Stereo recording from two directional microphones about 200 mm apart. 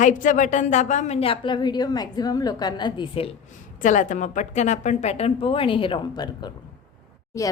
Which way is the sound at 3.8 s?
40° left (ahead or behind).